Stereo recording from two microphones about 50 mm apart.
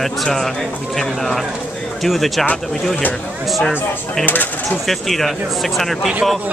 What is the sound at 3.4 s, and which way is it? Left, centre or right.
Speech, centre.